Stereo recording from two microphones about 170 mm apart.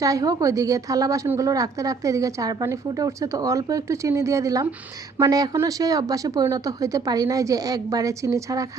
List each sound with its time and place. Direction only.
0.0 s a woman's voice: 20° right (ahead or behind)